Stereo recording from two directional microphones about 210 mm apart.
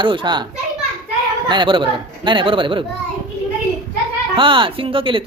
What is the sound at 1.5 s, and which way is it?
Speech, 20° right (ahead or behind).